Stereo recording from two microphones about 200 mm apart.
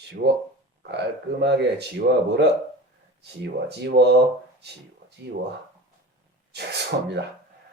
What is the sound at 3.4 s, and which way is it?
Speech, 55° right (ahead or behind).